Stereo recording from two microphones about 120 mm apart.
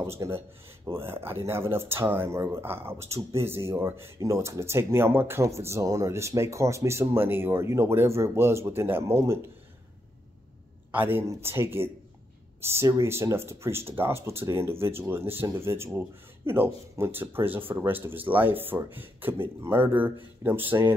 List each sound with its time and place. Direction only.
0.0 s speech: 25° right (ahead or behind)
10.9 s speech: 15° right (ahead or behind)